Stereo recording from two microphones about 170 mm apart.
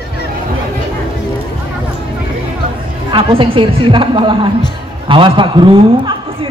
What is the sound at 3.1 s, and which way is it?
A woman's voice, 30° right (ahead or behind).